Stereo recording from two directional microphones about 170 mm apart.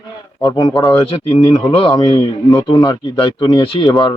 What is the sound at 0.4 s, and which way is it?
A man's voice, 25° left (ahead or behind).